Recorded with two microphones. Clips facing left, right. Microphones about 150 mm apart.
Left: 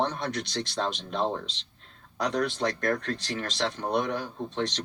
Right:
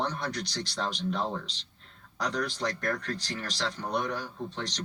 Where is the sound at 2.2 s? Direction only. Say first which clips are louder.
Left 4 dB; 65° left (ahead or behind).